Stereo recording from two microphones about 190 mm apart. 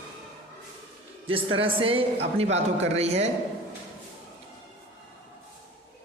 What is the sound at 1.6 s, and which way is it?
A man's voice, 30° right (ahead or behind).